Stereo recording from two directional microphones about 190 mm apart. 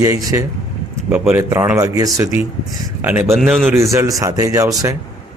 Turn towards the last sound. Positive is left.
turn(degrees=-15)  # may be behind; listen again after turning